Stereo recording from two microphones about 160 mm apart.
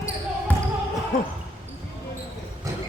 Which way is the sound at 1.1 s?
55° left (ahead or behind).